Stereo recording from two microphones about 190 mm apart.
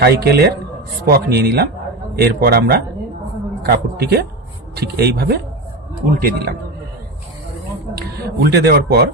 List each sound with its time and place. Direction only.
0.0 s a man's voice: 55° right (ahead or behind)
7.9 s speech: 55° right (ahead or behind)